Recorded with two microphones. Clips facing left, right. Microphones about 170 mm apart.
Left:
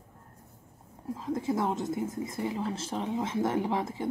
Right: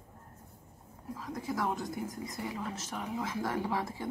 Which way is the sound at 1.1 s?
25° left (ahead or behind).